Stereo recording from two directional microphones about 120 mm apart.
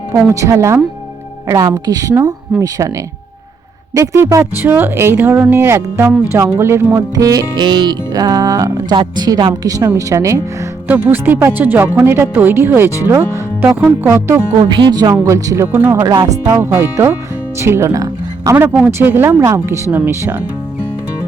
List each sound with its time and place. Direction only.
0.3 s speech: 25° right (ahead or behind)
3.9 s a woman's voice: 25° right (ahead or behind)
10.8 s speech: 15° right (ahead or behind)
14.6 s a woman's voice: 40° right (ahead or behind)
15.1 s speech: 25° right (ahead or behind)